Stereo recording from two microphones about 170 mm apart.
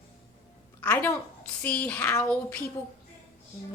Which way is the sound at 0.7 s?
10° left (ahead or behind).